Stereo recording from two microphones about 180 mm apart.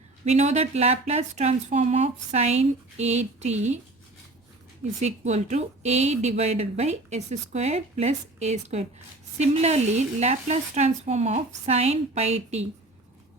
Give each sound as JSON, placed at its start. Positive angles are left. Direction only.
{"t": 0.3, "sound": "speech", "side_deg": -40}
{"t": 4.9, "sound": "speech", "side_deg": -40}